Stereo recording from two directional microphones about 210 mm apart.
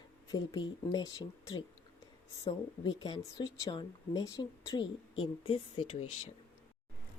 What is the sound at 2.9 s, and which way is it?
A woman's voice, 20° left (ahead or behind).